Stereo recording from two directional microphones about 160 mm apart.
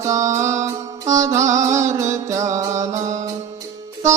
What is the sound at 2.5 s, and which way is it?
Music, 20° right (ahead or behind).